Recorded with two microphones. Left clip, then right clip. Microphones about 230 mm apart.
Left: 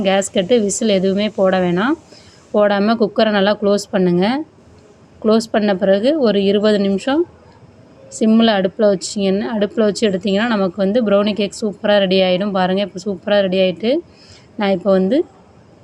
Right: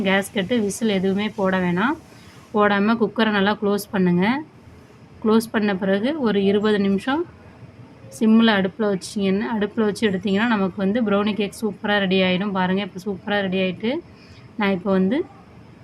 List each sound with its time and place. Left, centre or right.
0.0 s a woman's voice: centre
8.2 s a woman's voice: centre